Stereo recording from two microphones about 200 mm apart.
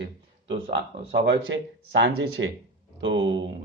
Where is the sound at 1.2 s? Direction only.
65° right (ahead or behind).